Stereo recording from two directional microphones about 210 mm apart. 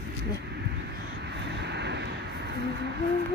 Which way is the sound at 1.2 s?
55° right (ahead or behind).